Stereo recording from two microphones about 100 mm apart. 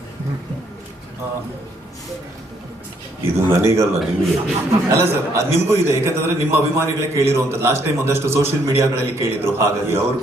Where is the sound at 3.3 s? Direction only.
30° right (ahead or behind).